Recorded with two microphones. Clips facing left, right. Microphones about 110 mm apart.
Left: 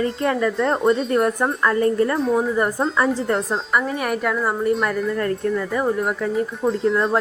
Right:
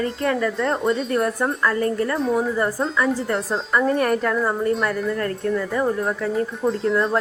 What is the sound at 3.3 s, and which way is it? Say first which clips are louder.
Speech: even; 5° left (ahead or behind).